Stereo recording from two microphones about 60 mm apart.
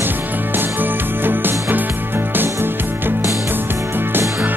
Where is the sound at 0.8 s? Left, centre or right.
Right.